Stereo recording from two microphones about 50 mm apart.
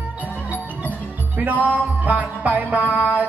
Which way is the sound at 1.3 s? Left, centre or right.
Right.